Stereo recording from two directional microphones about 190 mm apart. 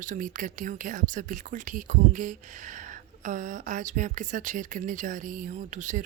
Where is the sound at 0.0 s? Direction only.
45° right (ahead or behind).